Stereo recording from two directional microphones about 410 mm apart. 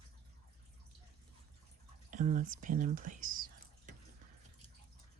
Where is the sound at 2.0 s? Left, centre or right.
Centre.